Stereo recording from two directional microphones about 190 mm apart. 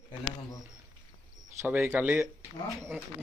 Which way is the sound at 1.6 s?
10° right (ahead or behind).